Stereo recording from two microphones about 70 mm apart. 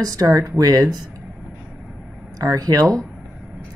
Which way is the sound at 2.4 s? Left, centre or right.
Right.